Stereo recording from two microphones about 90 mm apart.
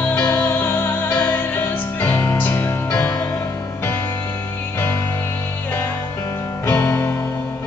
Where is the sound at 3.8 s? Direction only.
20° left (ahead or behind).